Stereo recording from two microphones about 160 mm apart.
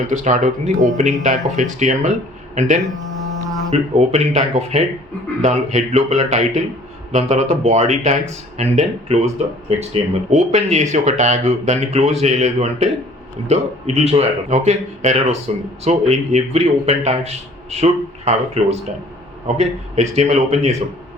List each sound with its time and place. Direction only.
0.1 s speech: 50° right (ahead or behind)